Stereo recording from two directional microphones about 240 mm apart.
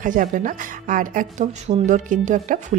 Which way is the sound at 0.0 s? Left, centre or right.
Right.